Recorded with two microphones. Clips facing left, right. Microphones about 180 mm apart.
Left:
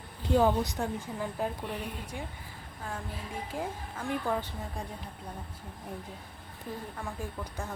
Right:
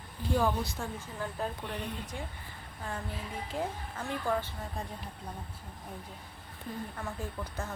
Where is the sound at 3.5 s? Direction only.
10° left (ahead or behind).